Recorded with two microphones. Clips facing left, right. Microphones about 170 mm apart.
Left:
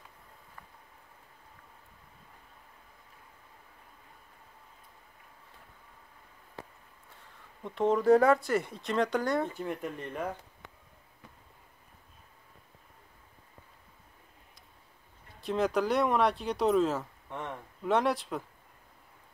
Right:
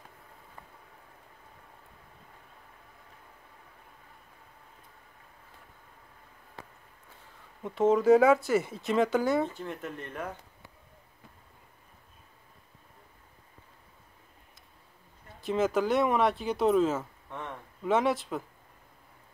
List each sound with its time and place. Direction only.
7.6 s speech: 5° right (ahead or behind)
15.4 s speech: centre (ahead or behind)
17.3 s a sound: 15° left (ahead or behind)
17.8 s speech: centre (ahead or behind)